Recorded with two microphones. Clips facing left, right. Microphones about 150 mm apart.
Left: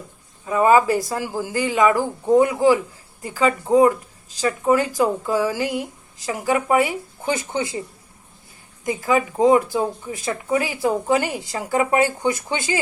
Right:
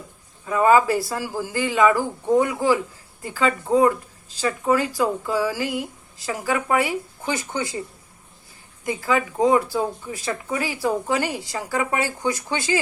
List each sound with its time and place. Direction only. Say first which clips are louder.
0.4 s speech: left 1 dB; 20° left (ahead or behind)
8.8 s speech: left 2 dB; 20° left (ahead or behind)